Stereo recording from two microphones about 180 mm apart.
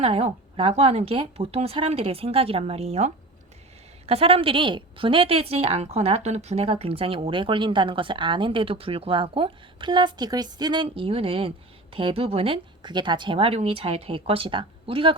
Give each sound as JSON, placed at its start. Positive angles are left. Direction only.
{"t": 0.0, "sound": "a woman's voice", "side_deg": -30}